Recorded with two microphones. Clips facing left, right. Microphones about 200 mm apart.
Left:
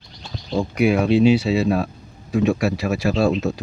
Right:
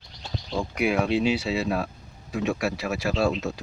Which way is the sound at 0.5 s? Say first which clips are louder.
Left 6 dB; 35° left (ahead or behind).